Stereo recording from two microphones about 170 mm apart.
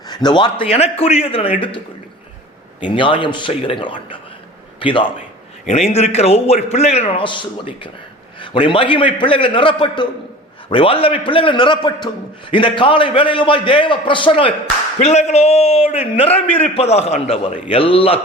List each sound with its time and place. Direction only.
0.1 s a man's voice: 25° left (ahead or behind)
2.9 s a man's voice: 30° left (ahead or behind)
15.0 s a man's voice: 40° left (ahead or behind)